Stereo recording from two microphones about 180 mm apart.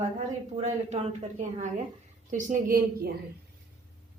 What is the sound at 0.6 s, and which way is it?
A woman's voice, 35° right (ahead or behind).